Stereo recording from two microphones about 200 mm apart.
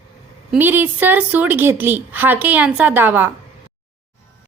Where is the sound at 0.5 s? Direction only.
10° right (ahead or behind).